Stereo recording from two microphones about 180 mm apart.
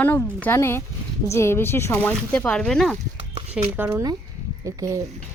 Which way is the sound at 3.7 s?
15° right (ahead or behind).